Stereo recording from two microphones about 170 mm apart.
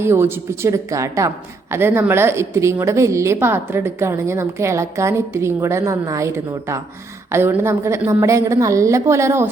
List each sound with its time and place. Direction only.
0.0 s a woman's voice: 15° right (ahead or behind)